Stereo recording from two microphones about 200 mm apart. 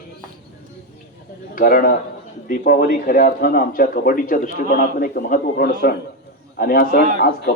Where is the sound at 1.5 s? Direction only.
45° left (ahead or behind).